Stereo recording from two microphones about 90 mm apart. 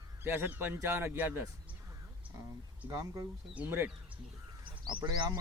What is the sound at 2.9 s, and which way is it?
Speech, 40° right (ahead or behind).